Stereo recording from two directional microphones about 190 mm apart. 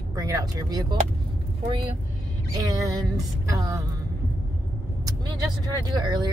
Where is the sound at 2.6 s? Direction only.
20° right (ahead or behind).